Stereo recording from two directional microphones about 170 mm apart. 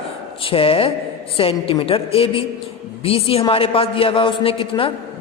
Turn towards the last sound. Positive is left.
turn(degrees=35)  # may be behind; listen again after turning